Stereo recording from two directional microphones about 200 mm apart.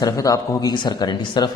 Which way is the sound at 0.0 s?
15° left (ahead or behind).